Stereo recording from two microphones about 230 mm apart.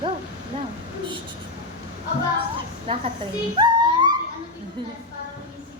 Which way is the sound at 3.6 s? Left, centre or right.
Centre.